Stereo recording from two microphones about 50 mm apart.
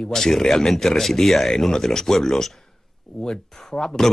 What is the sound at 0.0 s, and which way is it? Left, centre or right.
Speech, centre.